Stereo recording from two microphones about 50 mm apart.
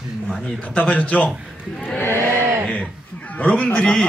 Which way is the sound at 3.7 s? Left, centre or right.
Centre.